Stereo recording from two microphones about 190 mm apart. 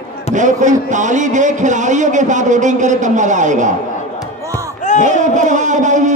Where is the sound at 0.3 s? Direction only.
40° right (ahead or behind).